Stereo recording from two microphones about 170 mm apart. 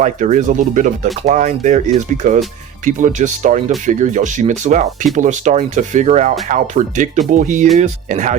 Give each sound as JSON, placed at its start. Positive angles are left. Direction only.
{"t": 0.0, "sound": "speech", "side_deg": -45}